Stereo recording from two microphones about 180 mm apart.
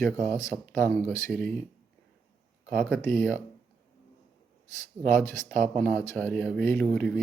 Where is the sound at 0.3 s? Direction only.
15° left (ahead or behind).